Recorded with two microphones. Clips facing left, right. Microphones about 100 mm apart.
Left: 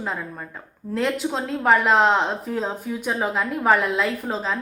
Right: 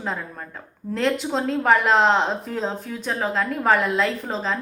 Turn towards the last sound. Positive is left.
turn(degrees=5)  # may be behind; listen again after turning